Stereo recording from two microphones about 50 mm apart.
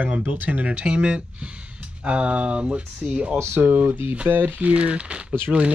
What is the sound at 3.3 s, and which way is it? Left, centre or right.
Speech, right.